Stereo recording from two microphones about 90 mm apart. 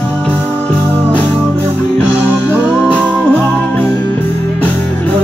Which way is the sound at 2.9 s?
15° left (ahead or behind).